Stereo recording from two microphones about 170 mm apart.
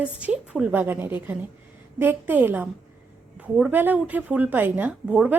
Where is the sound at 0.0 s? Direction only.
5° right (ahead or behind).